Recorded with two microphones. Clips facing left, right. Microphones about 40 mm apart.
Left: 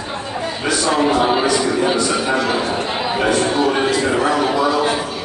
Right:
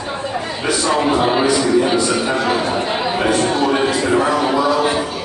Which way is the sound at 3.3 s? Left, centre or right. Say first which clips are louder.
Even; centre.